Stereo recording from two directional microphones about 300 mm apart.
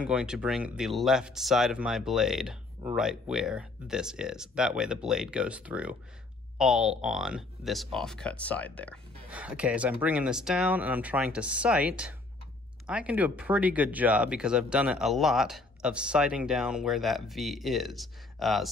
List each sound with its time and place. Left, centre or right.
0.0 s speech: centre